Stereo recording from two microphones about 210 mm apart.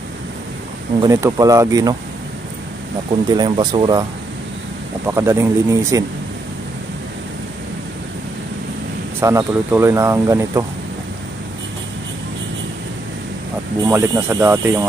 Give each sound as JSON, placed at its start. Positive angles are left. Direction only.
{"t": 1.0, "sound": "speech", "side_deg": -15}
{"t": 3.1, "sound": "speech", "side_deg": -20}
{"t": 5.0, "sound": "speech", "side_deg": -15}
{"t": 9.2, "sound": "speech", "side_deg": -15}
{"t": 13.7, "sound": "speech", "side_deg": -15}